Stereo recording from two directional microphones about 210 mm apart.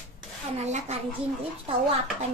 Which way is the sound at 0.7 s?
35° right (ahead or behind).